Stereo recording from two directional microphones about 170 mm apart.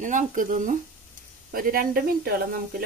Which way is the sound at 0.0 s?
50° right (ahead or behind).